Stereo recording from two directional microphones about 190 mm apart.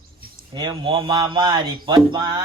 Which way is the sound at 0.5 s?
20° right (ahead or behind).